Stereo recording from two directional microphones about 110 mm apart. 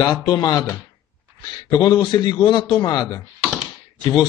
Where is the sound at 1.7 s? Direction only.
40° left (ahead or behind).